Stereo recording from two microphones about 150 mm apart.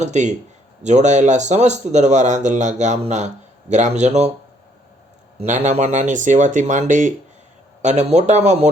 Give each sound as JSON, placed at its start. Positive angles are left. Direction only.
{"t": 0.0, "sound": "speech", "side_deg": -50}
{"t": 5.4, "sound": "speech", "side_deg": -50}